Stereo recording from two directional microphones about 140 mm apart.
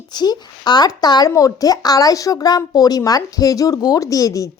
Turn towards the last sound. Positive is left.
turn(degrees=25)  # may be behind; listen again after turning